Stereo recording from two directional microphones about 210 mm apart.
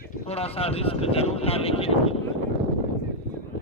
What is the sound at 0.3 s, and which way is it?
A man's voice, 30° left (ahead or behind).